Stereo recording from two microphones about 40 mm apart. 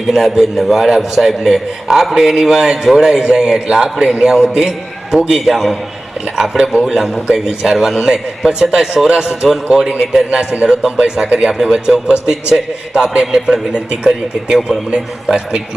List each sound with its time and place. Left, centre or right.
0.1 s a man's voice: centre; by 15.6 s right